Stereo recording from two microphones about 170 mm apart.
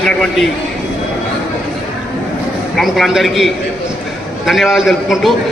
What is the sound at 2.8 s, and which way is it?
A man's voice, centre (ahead or behind).